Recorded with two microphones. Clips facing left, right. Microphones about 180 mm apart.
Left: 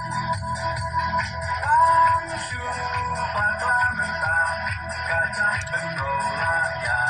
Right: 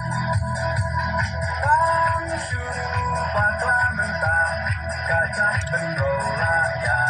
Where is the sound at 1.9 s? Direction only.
45° right (ahead or behind).